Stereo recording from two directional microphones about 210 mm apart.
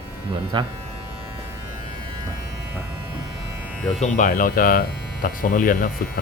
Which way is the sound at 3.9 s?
35° left (ahead or behind).